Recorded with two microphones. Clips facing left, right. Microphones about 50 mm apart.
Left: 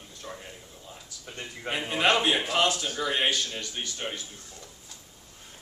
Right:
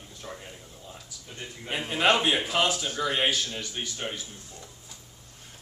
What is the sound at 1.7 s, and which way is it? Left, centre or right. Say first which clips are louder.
Speech: right 1 dB; centre.